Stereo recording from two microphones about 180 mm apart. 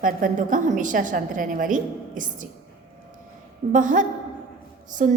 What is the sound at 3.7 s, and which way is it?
A woman's voice, 45° right (ahead or behind).